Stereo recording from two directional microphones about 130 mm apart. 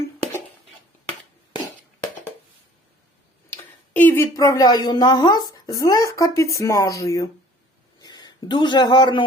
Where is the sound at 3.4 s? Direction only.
15° left (ahead or behind).